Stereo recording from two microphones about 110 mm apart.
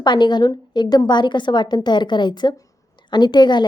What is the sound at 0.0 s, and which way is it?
A woman's voice, 45° left (ahead or behind).